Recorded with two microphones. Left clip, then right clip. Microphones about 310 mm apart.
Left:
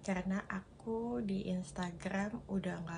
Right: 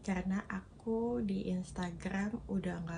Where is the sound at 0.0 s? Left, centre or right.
Centre.